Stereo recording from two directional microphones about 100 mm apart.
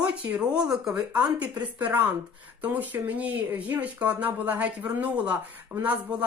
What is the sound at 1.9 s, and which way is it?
Speech, 15° right (ahead or behind).